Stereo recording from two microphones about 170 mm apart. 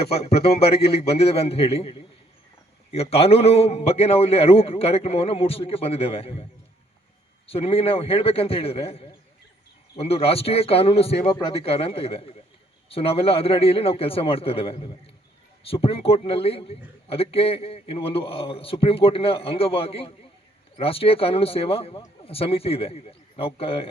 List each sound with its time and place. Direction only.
0.1 s a man's voice: 35° left (ahead or behind)
0.8 s a man's voice: 70° left (ahead or behind)
1.0 s a man's voice: 35° left (ahead or behind)
7.4 s a man's voice: 35° left (ahead or behind)